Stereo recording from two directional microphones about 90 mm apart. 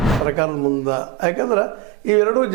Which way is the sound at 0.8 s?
25° right (ahead or behind).